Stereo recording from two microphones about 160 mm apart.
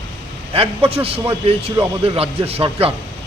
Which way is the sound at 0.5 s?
35° right (ahead or behind).